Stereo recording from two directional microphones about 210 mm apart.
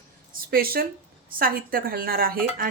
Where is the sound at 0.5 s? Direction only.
45° right (ahead or behind).